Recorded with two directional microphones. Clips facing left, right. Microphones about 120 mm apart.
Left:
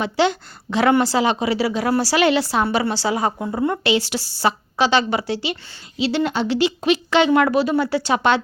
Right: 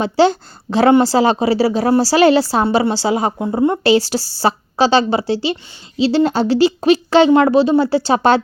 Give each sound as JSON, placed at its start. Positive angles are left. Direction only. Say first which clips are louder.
{"t": 0.0, "sound": "a woman's voice", "louder": "right 6 dB", "side_deg": -35}
{"t": 3.8, "sound": "a woman's voice", "louder": "right 6 dB", "side_deg": -35}